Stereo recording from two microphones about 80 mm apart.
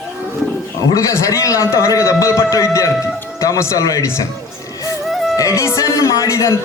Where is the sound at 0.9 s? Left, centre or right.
Left.